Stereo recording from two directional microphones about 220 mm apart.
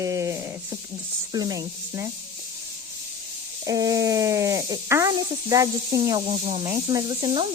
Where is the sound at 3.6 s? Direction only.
15° right (ahead or behind).